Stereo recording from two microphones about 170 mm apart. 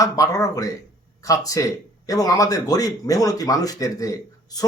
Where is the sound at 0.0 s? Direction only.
20° left (ahead or behind).